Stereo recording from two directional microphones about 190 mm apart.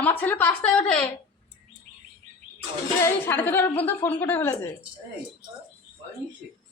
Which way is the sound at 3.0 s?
10° left (ahead or behind).